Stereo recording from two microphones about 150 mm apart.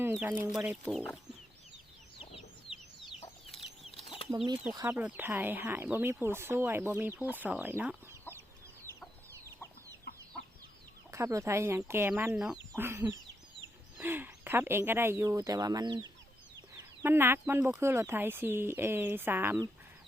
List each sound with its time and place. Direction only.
0.0 s speech: 15° right (ahead or behind)
2.1 s chicken: 35° left (ahead or behind)
4.7 s speech: 20° right (ahead or behind)
11.1 s speech: 20° right (ahead or behind)
17.0 s speech: 15° right (ahead or behind)